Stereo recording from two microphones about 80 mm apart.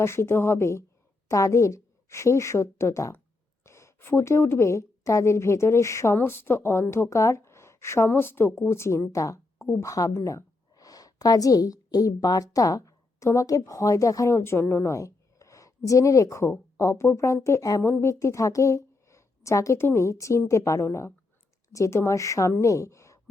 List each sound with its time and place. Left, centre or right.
0.0 s a woman's voice: left
6.1 s a woman's voice: left
14.9 s a sound: left
15.9 s a woman's voice: left